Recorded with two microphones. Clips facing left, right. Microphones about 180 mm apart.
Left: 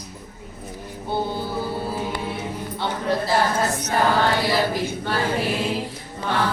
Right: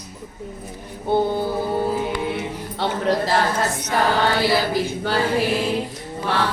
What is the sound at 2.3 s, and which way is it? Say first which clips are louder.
Music: right 2 dB; 80° right.